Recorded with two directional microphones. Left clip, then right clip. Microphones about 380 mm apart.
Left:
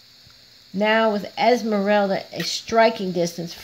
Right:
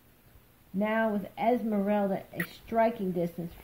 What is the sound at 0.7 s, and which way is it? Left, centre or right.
Speech, left.